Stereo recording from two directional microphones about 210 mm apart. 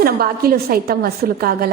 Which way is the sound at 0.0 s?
45° right (ahead or behind).